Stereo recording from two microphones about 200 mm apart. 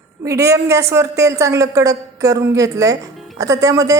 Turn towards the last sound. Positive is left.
turn(degrees=-15)  # may be behind; listen again after turning